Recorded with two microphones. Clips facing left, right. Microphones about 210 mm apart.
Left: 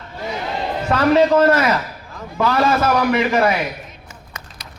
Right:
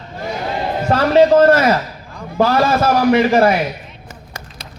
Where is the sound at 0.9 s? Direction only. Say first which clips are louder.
Right 3 dB; 35° right (ahead or behind).